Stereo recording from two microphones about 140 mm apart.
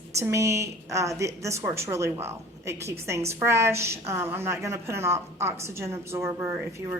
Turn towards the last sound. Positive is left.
turn(degrees=-15)  # may be behind; listen again after turning